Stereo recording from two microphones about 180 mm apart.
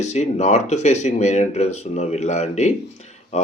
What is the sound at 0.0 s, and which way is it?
Speech, 40° left (ahead or behind).